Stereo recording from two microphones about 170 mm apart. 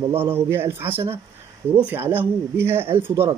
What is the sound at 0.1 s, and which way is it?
Speech, 15° right (ahead or behind).